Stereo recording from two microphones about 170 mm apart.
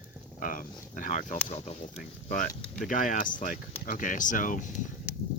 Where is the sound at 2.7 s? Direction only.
50° left (ahead or behind).